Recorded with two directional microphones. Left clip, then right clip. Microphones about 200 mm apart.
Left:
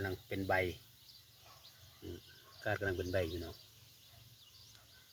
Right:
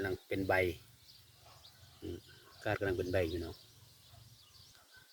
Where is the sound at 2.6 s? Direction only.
20° right (ahead or behind).